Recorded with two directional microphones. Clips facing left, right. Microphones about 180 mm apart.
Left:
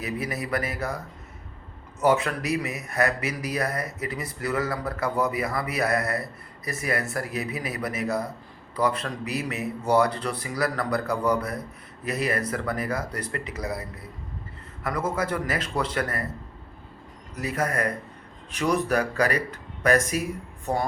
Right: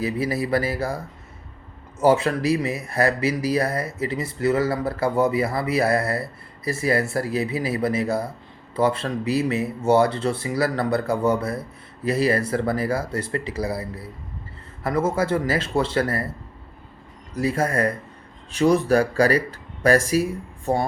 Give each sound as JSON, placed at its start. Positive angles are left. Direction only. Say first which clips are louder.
{"t": 0.0, "sound": "speech", "louder": "right 6 dB", "side_deg": -30}
{"t": 17.3, "sound": "speech", "louder": "right 5 dB", "side_deg": -30}